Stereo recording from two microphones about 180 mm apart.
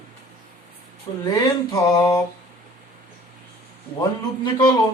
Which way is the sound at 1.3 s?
20° left (ahead or behind).